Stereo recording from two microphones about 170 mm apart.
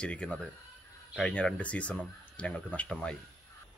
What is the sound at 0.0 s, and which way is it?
Speech, 5° left (ahead or behind).